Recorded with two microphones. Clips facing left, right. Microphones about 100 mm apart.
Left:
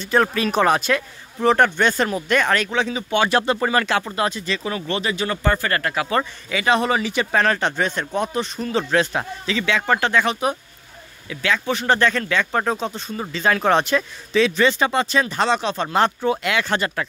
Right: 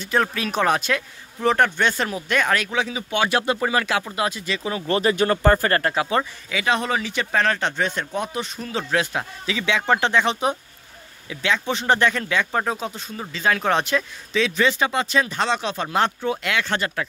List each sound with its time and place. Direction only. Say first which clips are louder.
0.0 s speech: left 3 dB; centre (ahead or behind)
4.8 s speech: right 7 dB; 40° right (ahead or behind)
6.5 s speech: left 3 dB; centre (ahead or behind)